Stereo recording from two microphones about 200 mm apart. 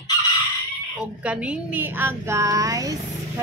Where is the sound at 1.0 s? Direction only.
5° right (ahead or behind).